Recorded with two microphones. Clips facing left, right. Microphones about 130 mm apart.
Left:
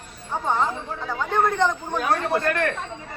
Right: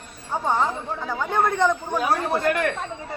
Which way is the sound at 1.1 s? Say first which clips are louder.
Left 1 dB; 5° right (ahead or behind).